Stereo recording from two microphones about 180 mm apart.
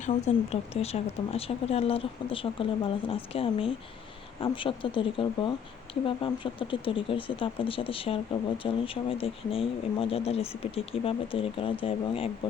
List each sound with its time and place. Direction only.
0.0 s speech: 40° left (ahead or behind)